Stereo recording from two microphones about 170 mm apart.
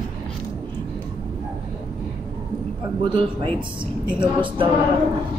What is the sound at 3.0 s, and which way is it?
A woman's voice, 30° right (ahead or behind).